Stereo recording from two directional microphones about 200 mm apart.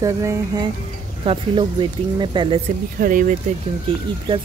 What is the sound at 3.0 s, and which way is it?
Speech, 45° right (ahead or behind).